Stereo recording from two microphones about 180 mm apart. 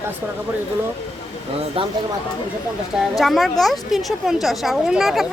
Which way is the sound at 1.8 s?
30° right (ahead or behind).